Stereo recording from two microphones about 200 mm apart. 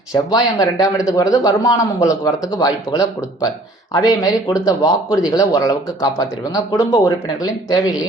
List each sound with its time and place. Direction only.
0.1 s a man's voice: 20° left (ahead or behind)